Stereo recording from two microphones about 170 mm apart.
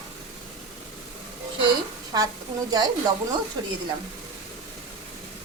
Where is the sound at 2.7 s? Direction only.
20° right (ahead or behind).